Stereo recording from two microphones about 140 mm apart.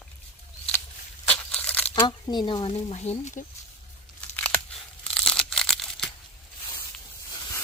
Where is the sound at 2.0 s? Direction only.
30° left (ahead or behind); by 3.4 s 55° left (ahead or behind).